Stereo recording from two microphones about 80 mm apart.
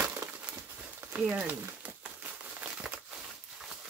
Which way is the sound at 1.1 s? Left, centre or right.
Centre.